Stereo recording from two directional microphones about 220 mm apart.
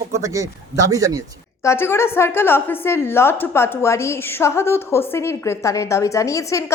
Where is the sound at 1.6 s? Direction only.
10° left (ahead or behind).